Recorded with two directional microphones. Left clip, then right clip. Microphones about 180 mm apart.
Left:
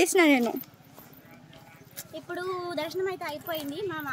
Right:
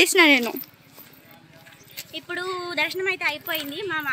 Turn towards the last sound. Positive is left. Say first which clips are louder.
# right 5 dB
turn(degrees=-10)  # may be behind; listen again after turning